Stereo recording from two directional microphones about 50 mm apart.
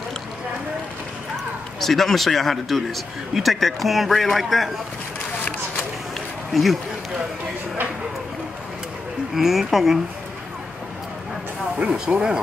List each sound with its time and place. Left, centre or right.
1.8 s speech: centre
6.5 s speech: centre
9.3 s speech: centre
11.8 s speech: centre